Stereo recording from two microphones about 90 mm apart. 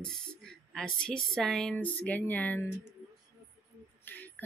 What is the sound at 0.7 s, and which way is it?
Speech, 10° left (ahead or behind).